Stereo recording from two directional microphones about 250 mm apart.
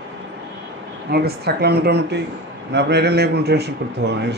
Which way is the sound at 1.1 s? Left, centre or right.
Right.